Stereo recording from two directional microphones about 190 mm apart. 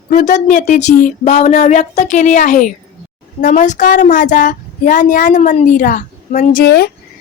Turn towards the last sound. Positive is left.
turn(degrees=55)  # may be behind; listen again after turning